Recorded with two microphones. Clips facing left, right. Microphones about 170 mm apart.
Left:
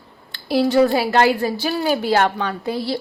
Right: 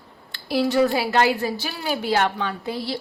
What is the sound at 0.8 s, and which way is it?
Speech, 45° left (ahead or behind).